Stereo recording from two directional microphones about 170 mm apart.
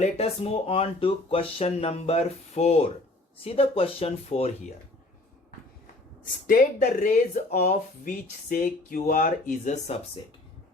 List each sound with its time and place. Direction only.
0.0 s speech: 35° left (ahead or behind)
6.5 s speech: 50° left (ahead or behind)